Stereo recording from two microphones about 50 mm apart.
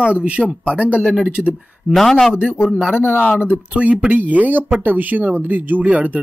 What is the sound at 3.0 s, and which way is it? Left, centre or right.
Speech, left.